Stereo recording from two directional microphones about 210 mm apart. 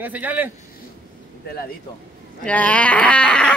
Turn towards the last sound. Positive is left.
turn(degrees=5)  # may be behind; listen again after turning